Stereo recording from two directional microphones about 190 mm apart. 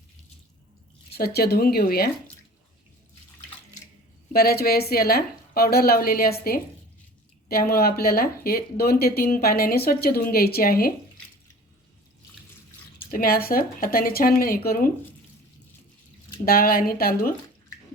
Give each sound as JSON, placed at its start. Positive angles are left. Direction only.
{"t": 1.1, "sound": "speech", "side_deg": 55}
{"t": 4.3, "sound": "speech", "side_deg": 55}
{"t": 13.1, "sound": "speech", "side_deg": 50}
{"t": 16.5, "sound": "speech", "side_deg": 50}